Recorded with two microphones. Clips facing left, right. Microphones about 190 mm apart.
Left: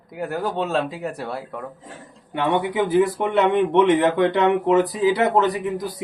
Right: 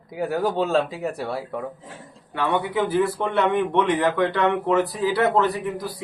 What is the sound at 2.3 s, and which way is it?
A man's voice, 20° left (ahead or behind).